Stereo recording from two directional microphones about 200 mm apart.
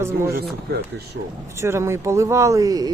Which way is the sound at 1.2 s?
60° right (ahead or behind).